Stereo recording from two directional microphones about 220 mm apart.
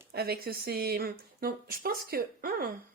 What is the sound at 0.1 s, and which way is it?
A woman's voice, 45° right (ahead or behind).